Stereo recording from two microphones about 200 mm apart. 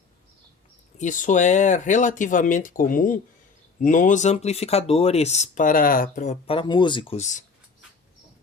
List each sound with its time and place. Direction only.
0.9 s speech: 40° left (ahead or behind)
6.5 s speech: 25° left (ahead or behind)
7.2 s speech: 40° left (ahead or behind)